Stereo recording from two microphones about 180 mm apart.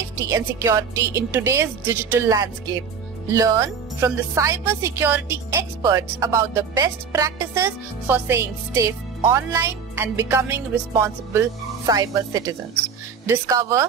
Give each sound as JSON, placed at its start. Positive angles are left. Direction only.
{"t": 0.2, "sound": "speech", "side_deg": -15}